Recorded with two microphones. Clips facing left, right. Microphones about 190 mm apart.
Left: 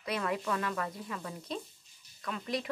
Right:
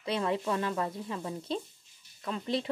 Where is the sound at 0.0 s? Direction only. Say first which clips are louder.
Right 3 dB; 25° right (ahead or behind).